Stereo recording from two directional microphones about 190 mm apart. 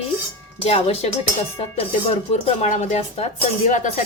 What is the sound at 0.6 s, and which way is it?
Speech, 35° left (ahead or behind).